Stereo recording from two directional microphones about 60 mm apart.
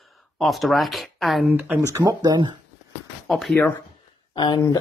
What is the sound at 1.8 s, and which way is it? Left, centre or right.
Speech, right.